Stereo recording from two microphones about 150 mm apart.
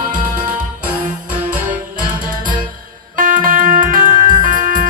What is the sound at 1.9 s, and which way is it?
Music, 65° right (ahead or behind).